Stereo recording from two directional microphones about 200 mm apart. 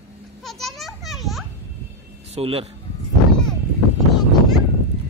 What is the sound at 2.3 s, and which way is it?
Speech, 30° right (ahead or behind).